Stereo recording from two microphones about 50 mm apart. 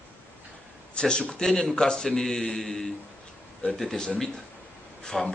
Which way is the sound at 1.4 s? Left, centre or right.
Centre.